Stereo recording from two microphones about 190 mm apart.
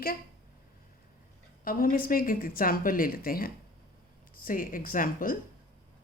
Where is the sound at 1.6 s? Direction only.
50° left (ahead or behind).